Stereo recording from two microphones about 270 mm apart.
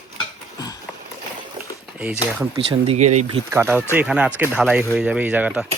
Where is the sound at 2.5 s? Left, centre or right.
Centre.